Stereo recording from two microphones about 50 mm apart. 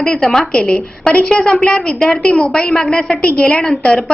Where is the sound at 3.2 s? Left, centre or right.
Left.